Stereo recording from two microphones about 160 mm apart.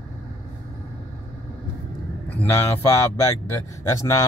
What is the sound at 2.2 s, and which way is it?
A man's voice, 15° left (ahead or behind).